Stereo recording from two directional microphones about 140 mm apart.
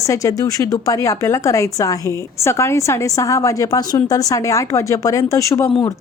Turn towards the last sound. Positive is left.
turn(degrees=20)  # may be behind; listen again after turning